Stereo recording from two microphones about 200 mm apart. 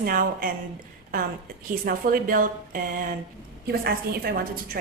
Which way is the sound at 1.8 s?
45° right (ahead or behind).